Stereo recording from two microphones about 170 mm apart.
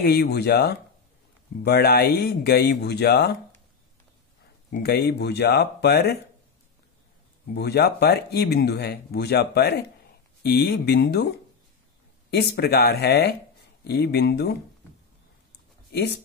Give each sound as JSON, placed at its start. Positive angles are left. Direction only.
{"t": 0.0, "sound": "speech", "side_deg": 70}
{"t": 4.7, "sound": "speech", "side_deg": 65}
{"t": 7.5, "sound": "speech", "side_deg": 70}
{"t": 15.9, "sound": "speech", "side_deg": 75}